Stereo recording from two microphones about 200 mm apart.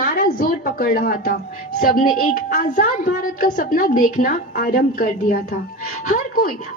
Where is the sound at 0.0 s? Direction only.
45° left (ahead or behind).